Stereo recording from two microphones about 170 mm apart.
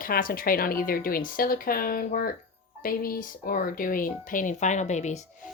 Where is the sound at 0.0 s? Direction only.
55° left (ahead or behind).